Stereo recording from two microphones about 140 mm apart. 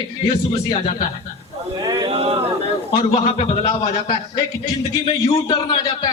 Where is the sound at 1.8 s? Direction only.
30° right (ahead or behind).